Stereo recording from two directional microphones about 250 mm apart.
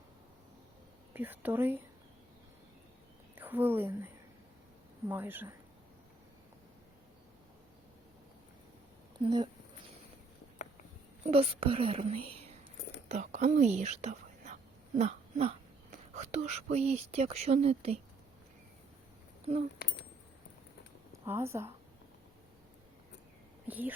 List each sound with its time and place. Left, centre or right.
1.1 s speech: centre
3.3 s a woman's voice: centre
9.2 s speech: centre
11.2 s speech: right
21.1 s speech: centre
23.6 s speech: centre